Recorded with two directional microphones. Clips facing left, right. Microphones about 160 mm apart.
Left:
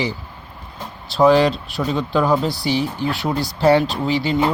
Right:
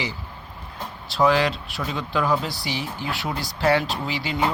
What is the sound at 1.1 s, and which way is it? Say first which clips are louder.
Speech: left 6 dB; 30° left (ahead or behind).